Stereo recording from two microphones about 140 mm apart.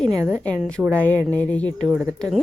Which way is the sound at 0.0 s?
25° right (ahead or behind).